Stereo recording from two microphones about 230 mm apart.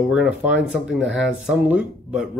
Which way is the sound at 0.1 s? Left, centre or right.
Centre.